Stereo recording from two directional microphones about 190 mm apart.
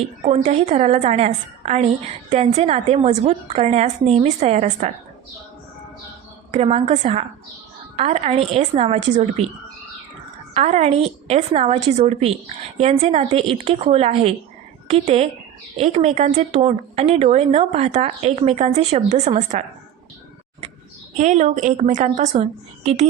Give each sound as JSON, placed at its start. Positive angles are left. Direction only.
{"t": 0.2, "sound": "a woman's voice", "side_deg": -35}
{"t": 6.5, "sound": "a woman's voice", "side_deg": -30}
{"t": 10.5, "sound": "a woman's voice", "side_deg": -35}
{"t": 21.2, "sound": "a woman's voice", "side_deg": -40}